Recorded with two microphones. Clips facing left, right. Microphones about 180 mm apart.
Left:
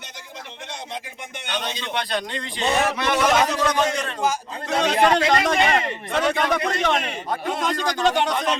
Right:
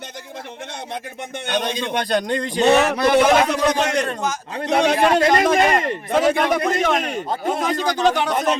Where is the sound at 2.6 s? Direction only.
65° right (ahead or behind).